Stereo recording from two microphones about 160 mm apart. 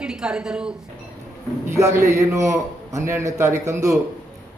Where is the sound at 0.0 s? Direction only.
5° right (ahead or behind).